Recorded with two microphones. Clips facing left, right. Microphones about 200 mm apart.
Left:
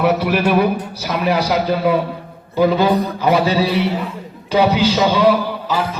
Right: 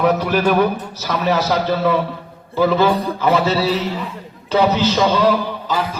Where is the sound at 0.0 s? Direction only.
10° left (ahead or behind).